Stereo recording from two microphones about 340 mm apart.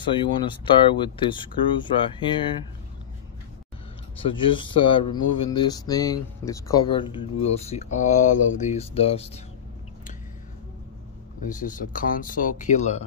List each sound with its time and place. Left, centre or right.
0.1 s speech: centre
4.2 s speech: centre
11.4 s speech: left